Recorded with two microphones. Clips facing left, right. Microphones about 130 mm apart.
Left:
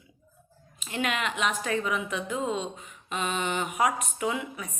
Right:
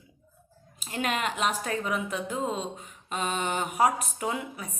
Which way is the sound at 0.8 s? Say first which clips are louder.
Even; 40° right (ahead or behind).